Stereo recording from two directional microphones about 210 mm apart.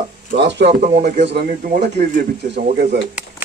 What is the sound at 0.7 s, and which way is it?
Speech, 35° right (ahead or behind).